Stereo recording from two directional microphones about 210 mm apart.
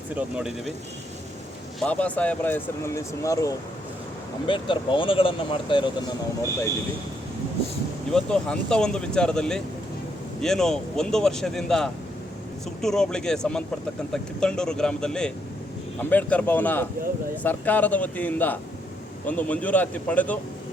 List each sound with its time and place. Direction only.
0.2 s speech: 5° right (ahead or behind)
1.8 s speech: 5° left (ahead or behind); by 5.9 s 25° left (ahead or behind)
8.1 s speech: 5° left (ahead or behind)